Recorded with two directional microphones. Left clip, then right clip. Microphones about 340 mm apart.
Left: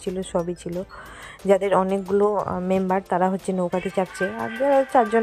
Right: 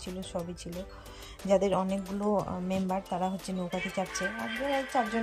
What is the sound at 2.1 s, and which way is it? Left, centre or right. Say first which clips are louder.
Speech: left 11 dB; left.